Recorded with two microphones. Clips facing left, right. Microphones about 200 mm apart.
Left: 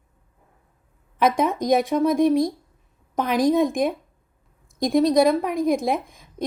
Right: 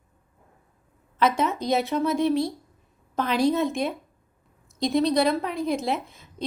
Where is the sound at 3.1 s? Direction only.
15° left (ahead or behind).